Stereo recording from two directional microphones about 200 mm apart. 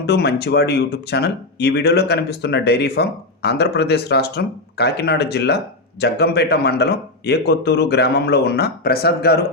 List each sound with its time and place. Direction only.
0.0 s speech: 55° left (ahead or behind)